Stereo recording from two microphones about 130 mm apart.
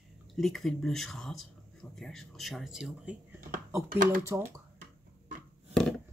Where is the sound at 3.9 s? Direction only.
90° right.